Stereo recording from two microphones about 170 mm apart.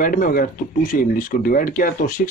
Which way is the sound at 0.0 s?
55° left (ahead or behind).